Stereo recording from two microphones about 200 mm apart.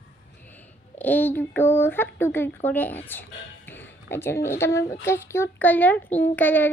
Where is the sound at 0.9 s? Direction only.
10° left (ahead or behind).